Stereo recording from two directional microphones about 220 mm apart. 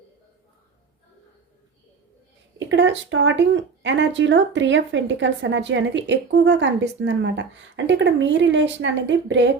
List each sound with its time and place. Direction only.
2.6 s speech: 55° right (ahead or behind)